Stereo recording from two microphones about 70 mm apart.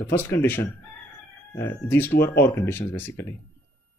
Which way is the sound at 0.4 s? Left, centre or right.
Left.